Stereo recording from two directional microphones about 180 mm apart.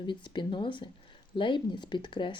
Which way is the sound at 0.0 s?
25° left (ahead or behind).